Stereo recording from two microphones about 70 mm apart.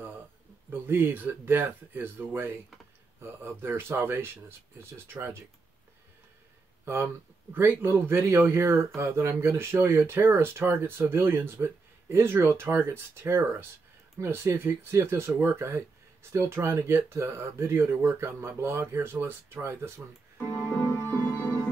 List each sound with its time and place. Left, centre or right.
0.7 s speech: right
6.8 s a sound: right
7.5 s speech: right
20.5 s music: left